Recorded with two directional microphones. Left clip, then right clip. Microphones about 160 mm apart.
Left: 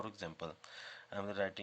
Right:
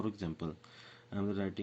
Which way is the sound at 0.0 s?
25° left (ahead or behind).